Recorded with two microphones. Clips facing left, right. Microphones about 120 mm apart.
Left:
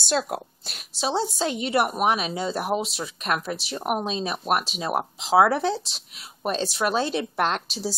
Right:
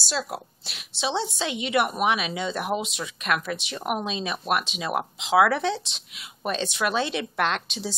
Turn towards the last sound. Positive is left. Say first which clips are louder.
# left 1 dB
turn(degrees=35)  # may be behind; listen again after turning